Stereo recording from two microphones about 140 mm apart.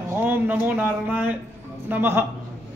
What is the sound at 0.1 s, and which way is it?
A man's voice, 15° right (ahead or behind).